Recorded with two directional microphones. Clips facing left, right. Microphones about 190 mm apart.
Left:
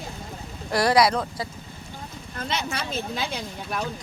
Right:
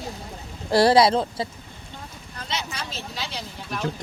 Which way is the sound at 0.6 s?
30° right (ahead or behind).